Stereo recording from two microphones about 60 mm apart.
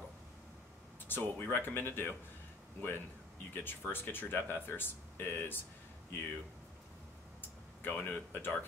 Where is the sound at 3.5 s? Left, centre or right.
Left.